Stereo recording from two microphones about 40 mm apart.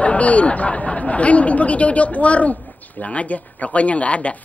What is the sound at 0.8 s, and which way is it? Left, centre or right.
Speech, left.